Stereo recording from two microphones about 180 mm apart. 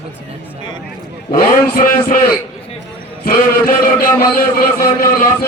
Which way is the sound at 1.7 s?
50° left (ahead or behind).